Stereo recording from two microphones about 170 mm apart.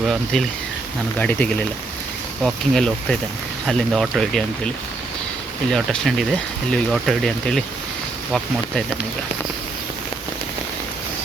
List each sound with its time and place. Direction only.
0.0 s speech: centre (ahead or behind)
5.7 s speech: centre (ahead or behind)